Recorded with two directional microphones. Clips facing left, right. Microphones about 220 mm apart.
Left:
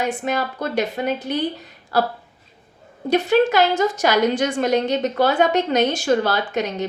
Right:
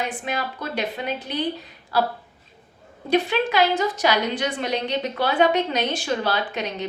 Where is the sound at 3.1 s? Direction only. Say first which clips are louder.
Left 5 dB; 45° left (ahead or behind).